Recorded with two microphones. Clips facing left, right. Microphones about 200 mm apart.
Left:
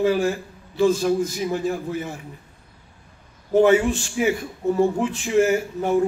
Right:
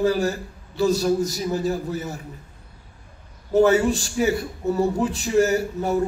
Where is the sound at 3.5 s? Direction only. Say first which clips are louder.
Left 1 dB; 40° right (ahead or behind).